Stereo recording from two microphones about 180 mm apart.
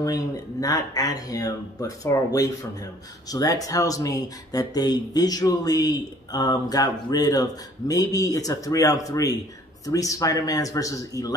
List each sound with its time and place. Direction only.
0.0 s speech: 20° left (ahead or behind)